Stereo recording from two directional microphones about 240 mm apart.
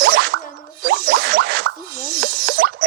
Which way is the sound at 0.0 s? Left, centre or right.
Right.